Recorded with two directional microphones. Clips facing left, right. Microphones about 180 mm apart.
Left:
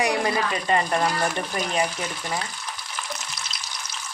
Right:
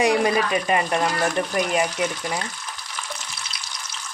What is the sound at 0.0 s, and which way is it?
Speech, 20° right (ahead or behind).